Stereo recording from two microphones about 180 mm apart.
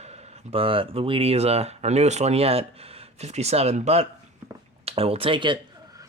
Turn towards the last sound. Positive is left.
turn(degrees=-25)  # may be behind; listen again after turning